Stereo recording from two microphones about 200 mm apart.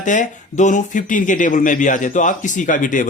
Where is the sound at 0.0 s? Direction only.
40° left (ahead or behind).